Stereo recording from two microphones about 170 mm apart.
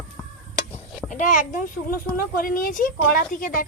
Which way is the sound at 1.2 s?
50° left (ahead or behind).